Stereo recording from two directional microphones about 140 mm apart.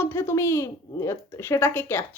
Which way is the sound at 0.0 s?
15° left (ahead or behind).